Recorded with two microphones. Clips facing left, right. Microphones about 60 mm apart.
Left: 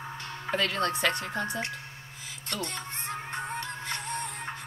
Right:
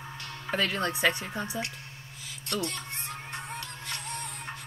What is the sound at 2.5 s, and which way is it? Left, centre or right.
Music, left.